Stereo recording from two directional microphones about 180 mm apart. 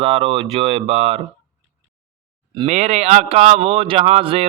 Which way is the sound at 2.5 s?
40° right (ahead or behind).